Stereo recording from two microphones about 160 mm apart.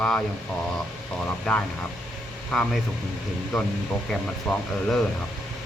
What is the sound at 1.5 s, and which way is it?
Speech, 5° left (ahead or behind).